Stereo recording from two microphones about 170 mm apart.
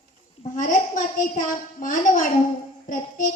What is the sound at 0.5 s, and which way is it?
A woman's voice, 50° left (ahead or behind).